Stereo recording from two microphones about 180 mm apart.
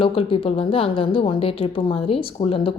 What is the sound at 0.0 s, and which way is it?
A woman's voice, 30° left (ahead or behind).